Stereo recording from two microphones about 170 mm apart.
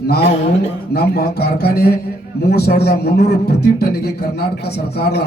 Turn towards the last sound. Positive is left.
turn(degrees=70)  # may be behind; listen again after turning